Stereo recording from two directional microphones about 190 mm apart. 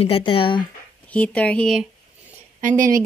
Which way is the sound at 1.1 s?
5° left (ahead or behind).